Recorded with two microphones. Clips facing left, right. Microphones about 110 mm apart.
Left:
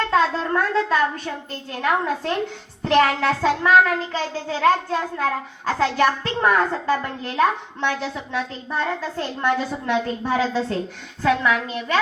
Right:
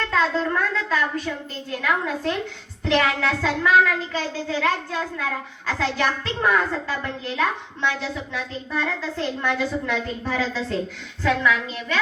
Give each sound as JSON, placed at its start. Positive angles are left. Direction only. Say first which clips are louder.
{"t": 0.1, "sound": "a child's voice", "louder": "even", "side_deg": 40}